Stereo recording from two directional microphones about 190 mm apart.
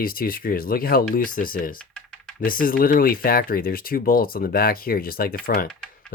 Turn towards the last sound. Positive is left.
turn(degrees=5)  # may be behind; listen again after turning